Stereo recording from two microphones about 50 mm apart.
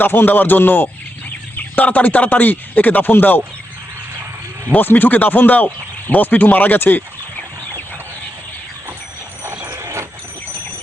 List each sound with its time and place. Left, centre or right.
0.0 s speech: left
4.7 s speech: left
9.4 s dog: right